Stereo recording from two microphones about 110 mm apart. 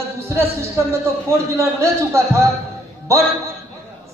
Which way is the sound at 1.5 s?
25° right (ahead or behind).